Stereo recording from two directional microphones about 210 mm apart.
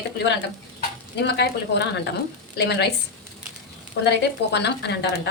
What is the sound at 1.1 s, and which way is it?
A woman's voice, 55° left (ahead or behind).